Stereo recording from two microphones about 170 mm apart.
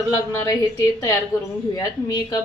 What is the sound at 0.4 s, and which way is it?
A woman's voice, 20° left (ahead or behind).